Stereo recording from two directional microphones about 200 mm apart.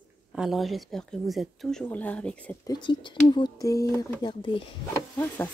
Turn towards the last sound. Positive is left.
turn(degrees=10)  # may be behind; listen again after turning